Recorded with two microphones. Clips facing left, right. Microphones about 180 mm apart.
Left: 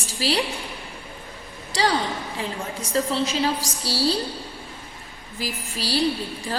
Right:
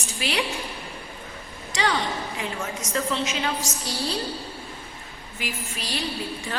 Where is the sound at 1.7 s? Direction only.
35° left (ahead or behind).